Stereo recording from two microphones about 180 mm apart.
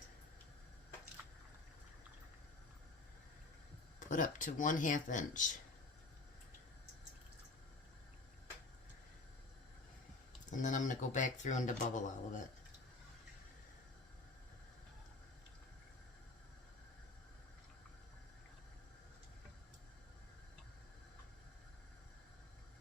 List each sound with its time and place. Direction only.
4.0 s speech: 45° left (ahead or behind)
10.5 s speech: 45° left (ahead or behind)